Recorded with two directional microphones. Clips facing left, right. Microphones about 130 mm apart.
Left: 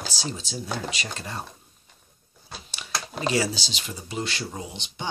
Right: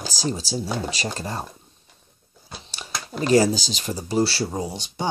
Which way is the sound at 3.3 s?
45° right (ahead or behind).